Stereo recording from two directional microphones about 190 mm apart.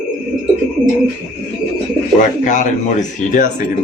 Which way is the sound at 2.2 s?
40° left (ahead or behind).